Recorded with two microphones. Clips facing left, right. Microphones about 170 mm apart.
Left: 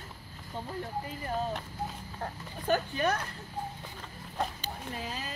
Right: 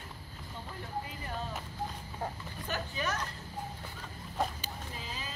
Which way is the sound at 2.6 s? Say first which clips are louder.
Left 8 dB; 55° left (ahead or behind).